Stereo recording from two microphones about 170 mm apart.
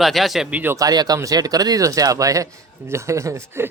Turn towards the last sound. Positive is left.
turn(degrees=-15)  # may be behind; listen again after turning